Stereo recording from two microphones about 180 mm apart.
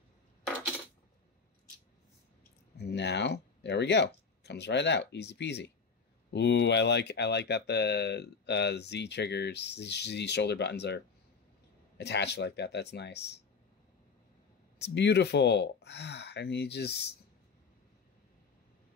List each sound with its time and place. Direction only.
2.8 s speech: 70° left (ahead or behind)
12.0 s speech: 70° left (ahead or behind)
14.8 s speech: 70° left (ahead or behind)